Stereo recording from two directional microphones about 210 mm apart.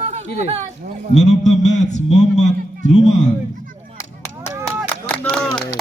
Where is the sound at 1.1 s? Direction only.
35° left (ahead or behind).